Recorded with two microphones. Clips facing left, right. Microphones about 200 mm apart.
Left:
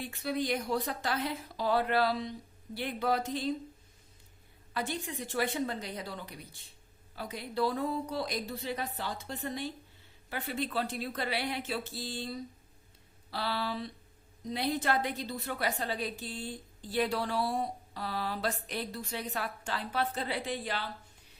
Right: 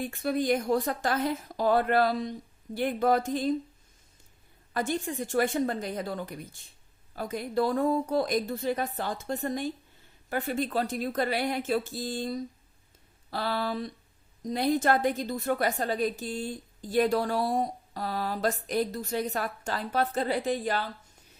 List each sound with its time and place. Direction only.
0.0 s a woman's voice: 50° right (ahead or behind)
4.7 s a woman's voice: 45° right (ahead or behind)